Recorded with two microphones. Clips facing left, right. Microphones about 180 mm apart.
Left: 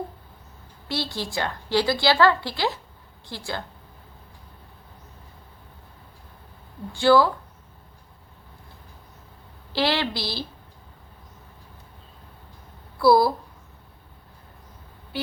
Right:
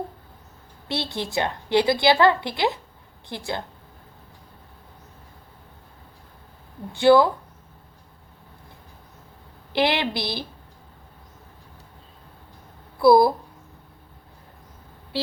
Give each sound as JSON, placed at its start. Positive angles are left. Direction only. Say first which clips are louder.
{"t": 0.9, "sound": "a woman's voice", "louder": "right 1 dB", "side_deg": -20}
{"t": 6.9, "sound": "a woman's voice", "louder": "right 2 dB", "side_deg": -20}
{"t": 9.7, "sound": "a woman's voice", "louder": "right 2 dB", "side_deg": -20}
{"t": 13.0, "sound": "a woman's voice", "louder": "right 2 dB", "side_deg": -20}